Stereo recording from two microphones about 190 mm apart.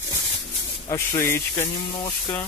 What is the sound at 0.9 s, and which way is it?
Speech, 15° left (ahead or behind).